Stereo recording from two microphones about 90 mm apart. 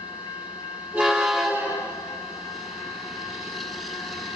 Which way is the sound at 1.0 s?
5° right (ahead or behind).